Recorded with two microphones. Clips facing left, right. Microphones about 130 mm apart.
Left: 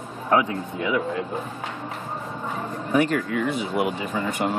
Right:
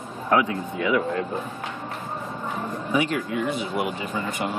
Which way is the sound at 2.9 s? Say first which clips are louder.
Left 3 dB; 50° left (ahead or behind).